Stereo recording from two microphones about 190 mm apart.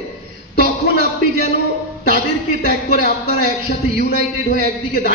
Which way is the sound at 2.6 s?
55° left (ahead or behind).